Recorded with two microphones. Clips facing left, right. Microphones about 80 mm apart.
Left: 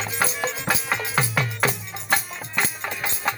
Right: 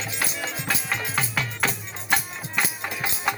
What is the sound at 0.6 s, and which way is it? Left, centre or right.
Music, centre.